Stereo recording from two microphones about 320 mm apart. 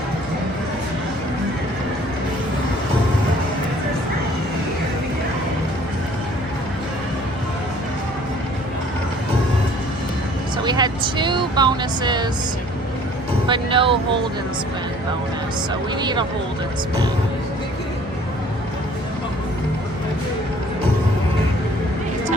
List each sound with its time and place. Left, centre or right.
10.6 s speech: centre
13.5 s speech: centre
16.0 s speech: centre